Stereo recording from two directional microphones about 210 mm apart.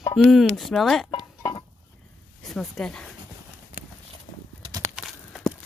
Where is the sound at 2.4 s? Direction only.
Centre (ahead or behind).